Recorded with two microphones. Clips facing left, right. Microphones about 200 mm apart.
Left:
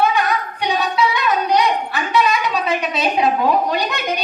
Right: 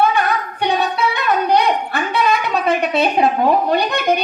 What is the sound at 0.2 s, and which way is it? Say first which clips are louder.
Singing: right 1 dB; 55° right (ahead or behind).